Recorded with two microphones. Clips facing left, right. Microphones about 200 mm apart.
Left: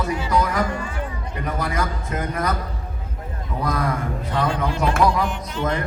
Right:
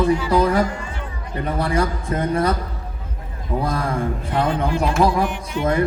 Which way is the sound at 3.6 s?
30° right (ahead or behind).